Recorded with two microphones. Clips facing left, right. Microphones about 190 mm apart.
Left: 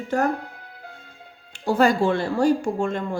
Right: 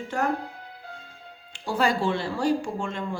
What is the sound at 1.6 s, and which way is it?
Speech, 45° left (ahead or behind).